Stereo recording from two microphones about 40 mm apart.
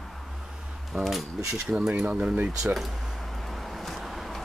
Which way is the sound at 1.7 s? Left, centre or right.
Right.